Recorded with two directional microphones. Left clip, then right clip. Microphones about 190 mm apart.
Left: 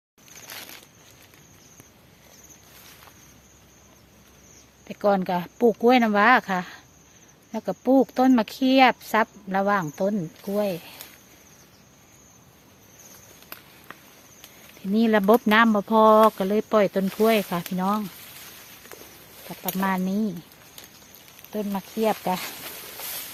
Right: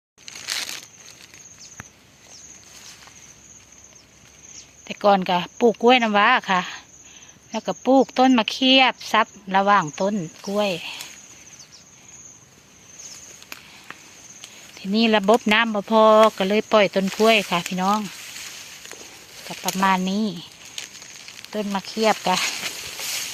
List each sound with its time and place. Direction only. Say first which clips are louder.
0.4 s a sound: right 12 dB; 30° right (ahead or behind)
4.9 s speech: right 5 dB; 5° right (ahead or behind)
14.8 s speech: right 2 dB; 5° left (ahead or behind)
19.6 s speech: right 6 dB; centre (ahead or behind)
21.5 s speech: right 3 dB; 10° right (ahead or behind)